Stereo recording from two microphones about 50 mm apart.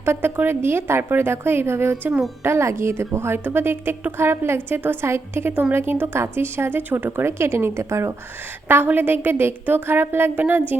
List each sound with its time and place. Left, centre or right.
0.0 s a woman's voice: right
7.3 s speech: right
8.6 s a woman's voice: right